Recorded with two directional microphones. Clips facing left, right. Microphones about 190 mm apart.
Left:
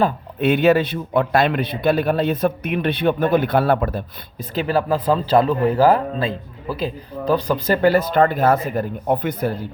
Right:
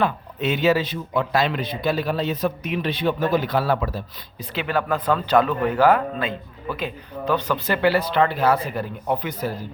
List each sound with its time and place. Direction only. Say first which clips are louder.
0.3 s a man's voice: left 5 dB; 55° left (ahead or behind)
4.5 s speech: left 4 dB; 35° left (ahead or behind); by 9.6 s 55° left (ahead or behind)